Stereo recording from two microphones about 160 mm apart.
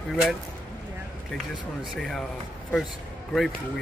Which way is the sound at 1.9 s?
Centre (ahead or behind).